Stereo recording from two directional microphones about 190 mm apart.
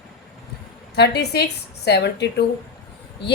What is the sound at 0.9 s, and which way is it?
A woman's voice, 60° left (ahead or behind).